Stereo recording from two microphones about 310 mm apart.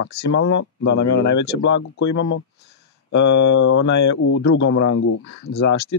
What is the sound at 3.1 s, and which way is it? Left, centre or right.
Speech, left.